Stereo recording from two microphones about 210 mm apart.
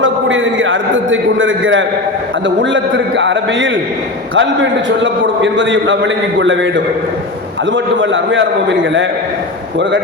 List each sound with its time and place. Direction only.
0.0 s a man's voice: 65° right (ahead or behind)